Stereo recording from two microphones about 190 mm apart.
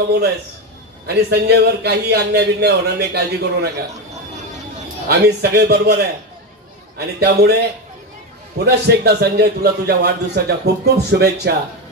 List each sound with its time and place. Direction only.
1.0 s a man's voice: 60° right (ahead or behind)
5.0 s a man's voice: 60° right (ahead or behind)
8.6 s a man's voice: 60° right (ahead or behind)